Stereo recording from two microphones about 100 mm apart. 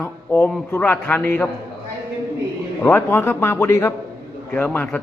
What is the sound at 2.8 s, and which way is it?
A man's voice, 20° left (ahead or behind).